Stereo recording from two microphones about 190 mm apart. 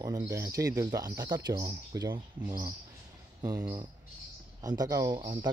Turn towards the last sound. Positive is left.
turn(degrees=-25)  # may be behind; listen again after turning